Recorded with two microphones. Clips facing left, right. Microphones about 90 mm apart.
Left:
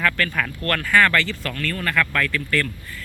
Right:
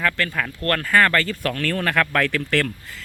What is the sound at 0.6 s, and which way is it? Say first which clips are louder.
Speech: even; 35° right (ahead or behind).